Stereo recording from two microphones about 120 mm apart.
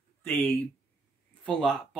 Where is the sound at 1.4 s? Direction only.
5° left (ahead or behind).